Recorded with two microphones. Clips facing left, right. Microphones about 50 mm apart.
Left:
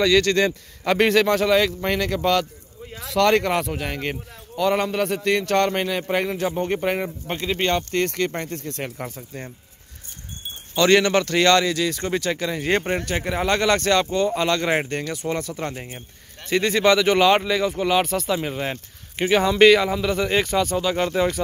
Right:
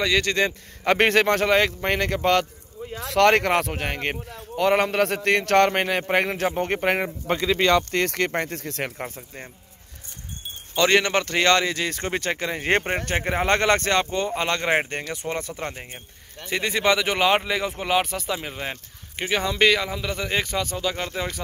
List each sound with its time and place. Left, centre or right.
0.0 s speech: centre
0.8 s speech: right
3.1 s speech: right
3.7 s a man's voice: right
7.9 s speech: right
8.9 s speech: right
10.8 s speech: centre
15.7 s speech: centre
17.9 s speech: centre